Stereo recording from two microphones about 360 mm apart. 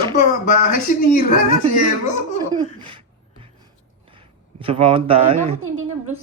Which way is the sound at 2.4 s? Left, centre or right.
Centre.